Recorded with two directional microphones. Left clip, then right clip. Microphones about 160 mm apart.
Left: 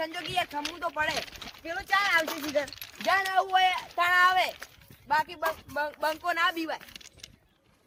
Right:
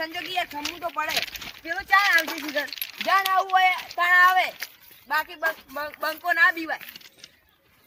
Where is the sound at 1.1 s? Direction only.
40° left (ahead or behind).